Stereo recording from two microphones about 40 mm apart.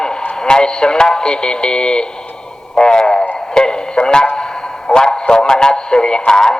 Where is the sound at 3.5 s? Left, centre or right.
Centre.